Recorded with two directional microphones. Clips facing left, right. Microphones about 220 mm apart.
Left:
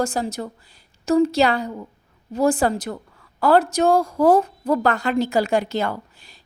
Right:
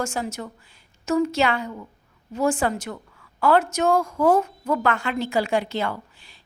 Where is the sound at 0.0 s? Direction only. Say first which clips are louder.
Left 4 dB; 35° left (ahead or behind).